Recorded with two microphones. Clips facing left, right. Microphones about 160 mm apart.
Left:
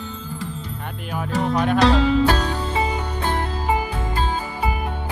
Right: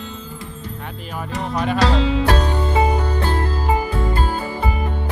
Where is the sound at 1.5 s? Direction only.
Centre (ahead or behind).